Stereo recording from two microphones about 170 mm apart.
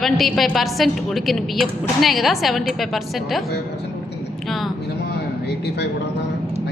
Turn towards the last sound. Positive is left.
turn(degrees=75)  # may be behind; listen again after turning